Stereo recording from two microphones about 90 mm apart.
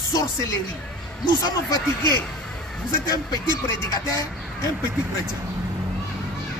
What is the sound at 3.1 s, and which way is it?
Speech, 45° left (ahead or behind).